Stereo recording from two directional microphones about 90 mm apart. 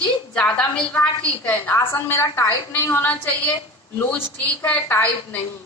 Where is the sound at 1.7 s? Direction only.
30° left (ahead or behind).